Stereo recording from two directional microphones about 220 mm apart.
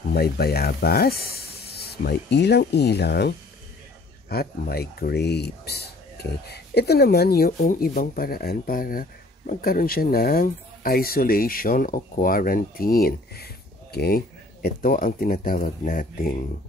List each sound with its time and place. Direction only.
0.1 s speech: 45° left (ahead or behind)